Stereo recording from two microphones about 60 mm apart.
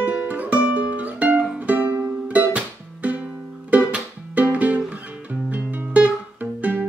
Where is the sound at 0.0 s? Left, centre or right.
Right.